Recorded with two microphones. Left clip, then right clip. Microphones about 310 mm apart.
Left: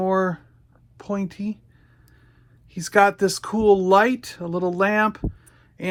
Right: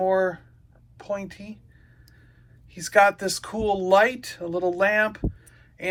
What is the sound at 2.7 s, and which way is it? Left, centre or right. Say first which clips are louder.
Speech: left 1 dB; centre.